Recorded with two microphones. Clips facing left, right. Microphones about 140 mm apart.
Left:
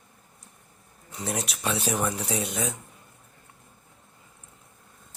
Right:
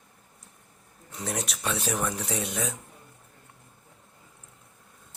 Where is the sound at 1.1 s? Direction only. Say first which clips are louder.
Left 1 dB; 5° left (ahead or behind).